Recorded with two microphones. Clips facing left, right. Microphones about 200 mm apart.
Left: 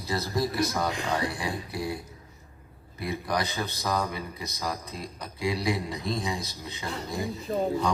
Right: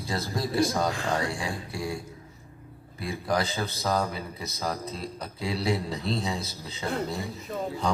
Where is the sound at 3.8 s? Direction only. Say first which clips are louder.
Right 2 dB; 30° right (ahead or behind).